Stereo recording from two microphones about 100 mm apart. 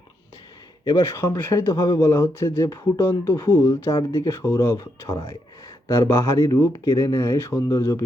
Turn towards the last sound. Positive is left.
turn(degrees=35)  # may be behind; listen again after turning